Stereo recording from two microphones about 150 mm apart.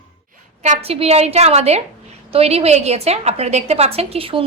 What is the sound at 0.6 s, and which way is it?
A woman's voice, 45° right (ahead or behind).